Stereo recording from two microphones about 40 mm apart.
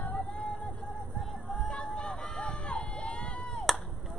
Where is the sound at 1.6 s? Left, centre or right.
Left.